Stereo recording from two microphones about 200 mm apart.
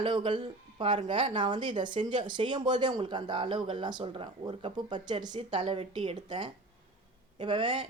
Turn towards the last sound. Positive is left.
turn(degrees=-25)  # may be behind; listen again after turning